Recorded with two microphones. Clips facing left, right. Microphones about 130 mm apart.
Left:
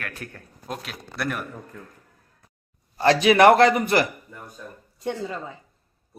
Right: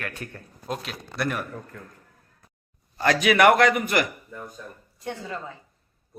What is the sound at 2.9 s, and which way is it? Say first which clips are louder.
A man's voice: left 3 dB; 30° left (ahead or behind).